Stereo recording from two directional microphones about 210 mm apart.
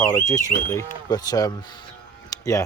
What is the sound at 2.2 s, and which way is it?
Music, 15° left (ahead or behind).